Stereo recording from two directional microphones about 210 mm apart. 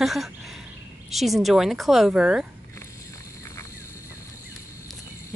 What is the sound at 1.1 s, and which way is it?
Speech, centre (ahead or behind).